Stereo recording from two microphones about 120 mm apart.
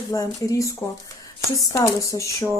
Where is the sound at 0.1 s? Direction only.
30° left (ahead or behind).